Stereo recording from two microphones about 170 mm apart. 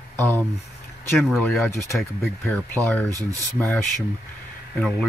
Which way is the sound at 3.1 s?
20° right (ahead or behind).